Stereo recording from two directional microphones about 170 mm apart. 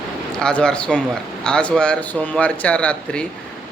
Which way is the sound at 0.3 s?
5° left (ahead or behind).